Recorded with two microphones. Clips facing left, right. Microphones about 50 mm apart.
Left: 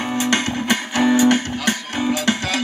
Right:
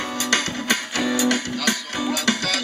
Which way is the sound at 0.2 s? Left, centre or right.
Left.